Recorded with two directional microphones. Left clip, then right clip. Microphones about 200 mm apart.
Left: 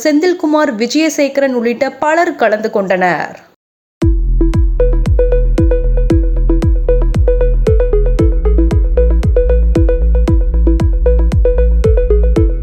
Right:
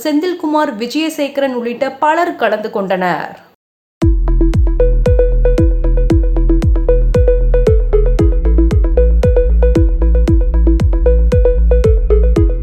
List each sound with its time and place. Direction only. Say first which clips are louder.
0.0 s speech: left 4 dB; 20° left (ahead or behind)
4.0 s music: even; centre (ahead or behind)